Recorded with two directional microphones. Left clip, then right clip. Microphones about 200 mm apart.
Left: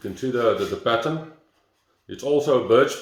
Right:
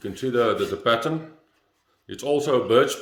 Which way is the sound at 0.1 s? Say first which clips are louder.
Even; 20° right (ahead or behind).